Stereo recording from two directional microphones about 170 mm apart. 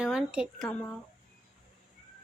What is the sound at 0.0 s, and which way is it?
Speech, 5° right (ahead or behind).